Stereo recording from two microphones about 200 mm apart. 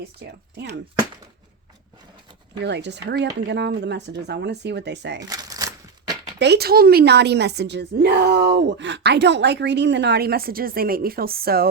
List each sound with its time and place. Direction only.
0.3 s a woman's voice: 55° right (ahead or behind)
2.6 s a woman's voice: 60° right (ahead or behind)
5.3 s a sound: 20° right (ahead or behind)
6.4 s a woman's voice: 55° right (ahead or behind)